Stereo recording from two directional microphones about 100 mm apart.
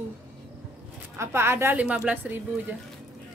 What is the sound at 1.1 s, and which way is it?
Speech, 25° right (ahead or behind).